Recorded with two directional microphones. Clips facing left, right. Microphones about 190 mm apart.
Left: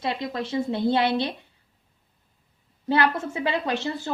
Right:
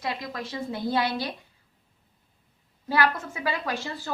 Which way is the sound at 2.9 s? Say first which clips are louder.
Left 3 dB; 25° left (ahead or behind).